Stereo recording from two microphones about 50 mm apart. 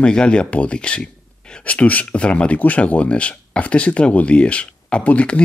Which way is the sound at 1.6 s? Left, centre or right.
Left.